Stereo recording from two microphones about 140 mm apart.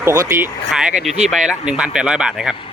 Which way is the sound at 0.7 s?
5° right (ahead or behind).